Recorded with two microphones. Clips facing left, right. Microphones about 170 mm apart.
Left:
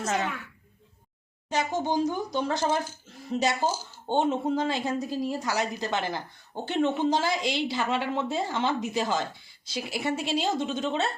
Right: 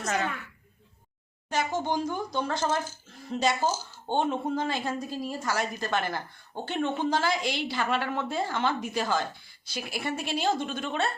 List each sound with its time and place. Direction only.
1.5 s speech: 15° left (ahead or behind)